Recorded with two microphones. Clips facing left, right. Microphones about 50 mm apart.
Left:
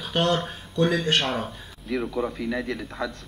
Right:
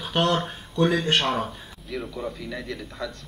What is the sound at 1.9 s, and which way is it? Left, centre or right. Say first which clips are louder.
Speech: left 5 dB; centre.